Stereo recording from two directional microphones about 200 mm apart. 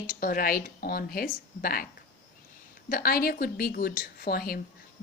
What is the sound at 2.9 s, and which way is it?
Speech, 45° left (ahead or behind).